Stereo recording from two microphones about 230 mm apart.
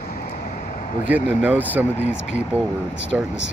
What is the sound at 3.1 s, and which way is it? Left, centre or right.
Speech, centre.